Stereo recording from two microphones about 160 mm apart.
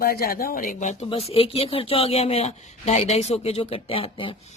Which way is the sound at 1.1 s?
35° left (ahead or behind).